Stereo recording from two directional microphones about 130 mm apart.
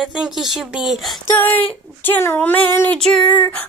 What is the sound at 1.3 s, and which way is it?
Speech, 15° left (ahead or behind).